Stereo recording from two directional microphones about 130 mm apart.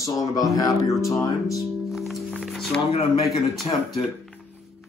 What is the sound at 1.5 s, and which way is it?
Music, centre (ahead or behind).